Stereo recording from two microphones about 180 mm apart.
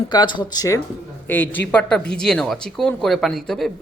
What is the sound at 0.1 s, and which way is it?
Speech, 25° left (ahead or behind).